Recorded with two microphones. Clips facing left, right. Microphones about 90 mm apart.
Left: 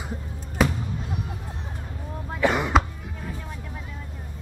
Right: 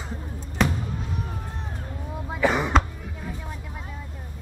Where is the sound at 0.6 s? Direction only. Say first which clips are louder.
Left 1 dB; 5° left (ahead or behind).